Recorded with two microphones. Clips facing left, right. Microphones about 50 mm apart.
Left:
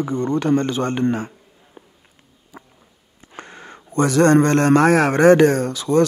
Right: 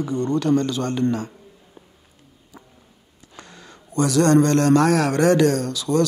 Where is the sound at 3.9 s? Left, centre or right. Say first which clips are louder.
Left 2 dB; left.